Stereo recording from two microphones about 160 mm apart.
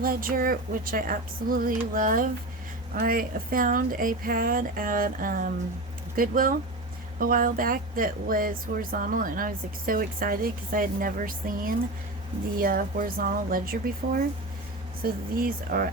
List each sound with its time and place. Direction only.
0.0 s speech: 65° right (ahead or behind)